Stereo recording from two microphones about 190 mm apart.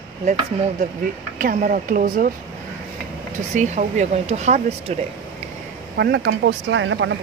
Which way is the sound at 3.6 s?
40° right (ahead or behind).